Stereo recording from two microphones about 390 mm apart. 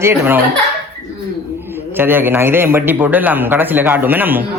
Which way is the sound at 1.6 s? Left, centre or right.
Centre.